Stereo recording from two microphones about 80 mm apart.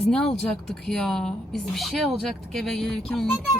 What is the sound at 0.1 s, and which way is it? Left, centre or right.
A woman's voice, centre.